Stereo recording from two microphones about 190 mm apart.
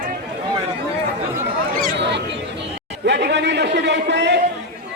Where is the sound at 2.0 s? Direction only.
65° right (ahead or behind).